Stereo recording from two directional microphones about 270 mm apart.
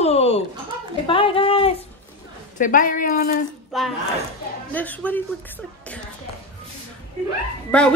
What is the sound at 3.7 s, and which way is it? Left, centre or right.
A woman's voice, centre.